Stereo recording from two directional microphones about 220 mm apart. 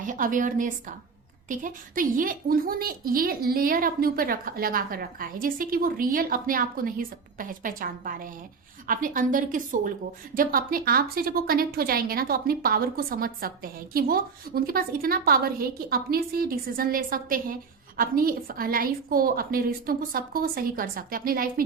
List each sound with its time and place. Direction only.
0.0 s a woman's voice: 35° right (ahead or behind)